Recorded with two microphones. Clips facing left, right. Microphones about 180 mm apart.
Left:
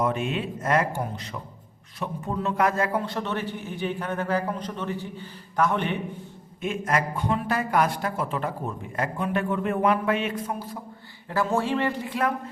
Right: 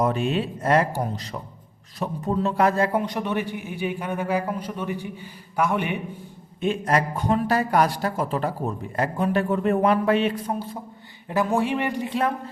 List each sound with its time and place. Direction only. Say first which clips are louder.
0.0 s speech: right 3 dB; 35° right (ahead or behind)
3.0 s a man's voice: right 3 dB; 15° right (ahead or behind)
6.6 s speech: right 4 dB; 30° right (ahead or behind)
11.3 s a man's voice: right 2 dB; 15° right (ahead or behind)